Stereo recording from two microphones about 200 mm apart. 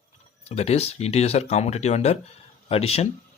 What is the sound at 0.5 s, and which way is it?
Speech, 30° left (ahead or behind).